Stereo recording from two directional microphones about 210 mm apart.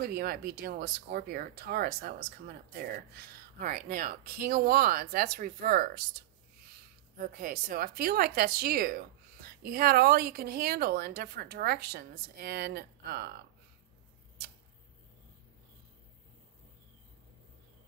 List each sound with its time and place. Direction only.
0.1 s speech: 50° right (ahead or behind)
7.2 s speech: 45° right (ahead or behind)